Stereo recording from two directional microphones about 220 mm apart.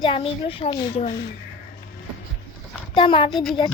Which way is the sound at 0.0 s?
25° left (ahead or behind).